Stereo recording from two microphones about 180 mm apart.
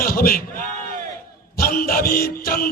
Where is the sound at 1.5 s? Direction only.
55° left (ahead or behind).